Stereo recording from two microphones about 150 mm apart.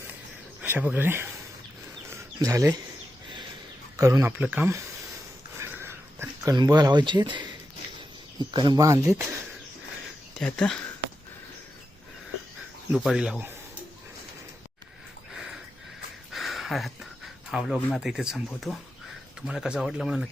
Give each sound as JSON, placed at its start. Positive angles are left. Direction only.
{"t": 0.6, "sound": "speech", "side_deg": -10}
{"t": 2.4, "sound": "speech", "side_deg": -20}
{"t": 3.9, "sound": "speech", "side_deg": -20}
{"t": 5.5, "sound": "a sound", "side_deg": -15}
{"t": 8.4, "sound": "speech", "side_deg": -30}
{"t": 10.3, "sound": "speech", "side_deg": 5}
{"t": 12.9, "sound": "speech", "side_deg": -5}
{"t": 16.3, "sound": "a sound", "side_deg": 0}
{"t": 17.5, "sound": "speech", "side_deg": -5}